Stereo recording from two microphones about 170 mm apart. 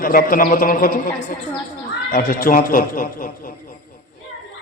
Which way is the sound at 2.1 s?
55° left (ahead or behind).